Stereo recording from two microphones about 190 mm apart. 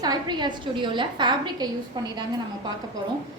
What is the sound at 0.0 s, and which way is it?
A woman's voice, 20° right (ahead or behind).